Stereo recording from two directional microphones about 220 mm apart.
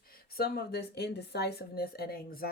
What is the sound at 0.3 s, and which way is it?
A woman's voice, 45° left (ahead or behind).